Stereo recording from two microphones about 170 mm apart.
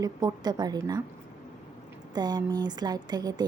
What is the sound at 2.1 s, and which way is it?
Speech, 25° right (ahead or behind).